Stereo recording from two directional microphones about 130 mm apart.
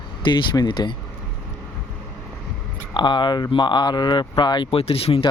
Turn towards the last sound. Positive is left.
turn(degrees=45)  # may be behind; listen again after turning